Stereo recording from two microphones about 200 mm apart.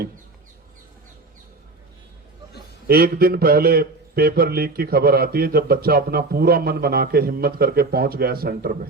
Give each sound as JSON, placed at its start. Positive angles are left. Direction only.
{"t": 2.8, "sound": "a man's voice", "side_deg": -50}